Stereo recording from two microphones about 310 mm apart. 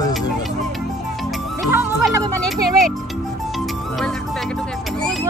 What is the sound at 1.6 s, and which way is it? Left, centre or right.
Speech, centre.